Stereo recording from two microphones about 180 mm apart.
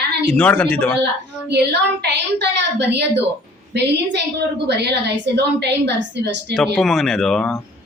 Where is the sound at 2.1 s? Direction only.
70° right (ahead or behind).